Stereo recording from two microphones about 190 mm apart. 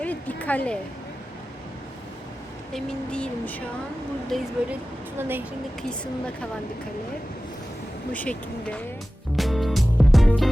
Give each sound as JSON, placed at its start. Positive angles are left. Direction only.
{"t": 0.0, "sound": "a sound", "side_deg": 10}
{"t": 2.7, "sound": "speech", "side_deg": 5}
{"t": 4.3, "sound": "speech", "side_deg": -10}
{"t": 8.1, "sound": "speech", "side_deg": 5}
{"t": 9.3, "sound": "music", "side_deg": 0}